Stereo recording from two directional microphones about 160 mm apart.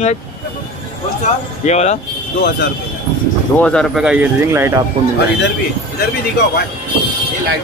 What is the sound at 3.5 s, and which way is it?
Speech, 5° left (ahead or behind).